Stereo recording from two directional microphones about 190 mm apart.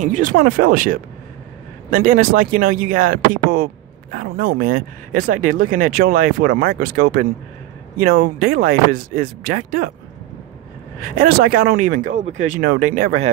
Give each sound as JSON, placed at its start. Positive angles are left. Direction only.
{"t": 0.0, "sound": "speech", "side_deg": -40}
{"t": 11.0, "sound": "speech", "side_deg": -50}